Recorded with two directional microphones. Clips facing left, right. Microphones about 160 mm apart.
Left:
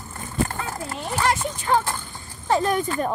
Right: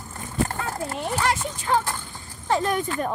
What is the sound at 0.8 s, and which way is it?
Children playing, 50° right (ahead or behind).